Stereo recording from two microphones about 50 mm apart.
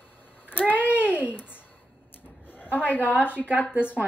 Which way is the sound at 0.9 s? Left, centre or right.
Right.